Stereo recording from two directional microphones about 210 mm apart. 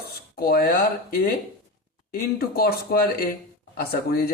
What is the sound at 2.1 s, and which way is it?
A man's voice, 45° left (ahead or behind).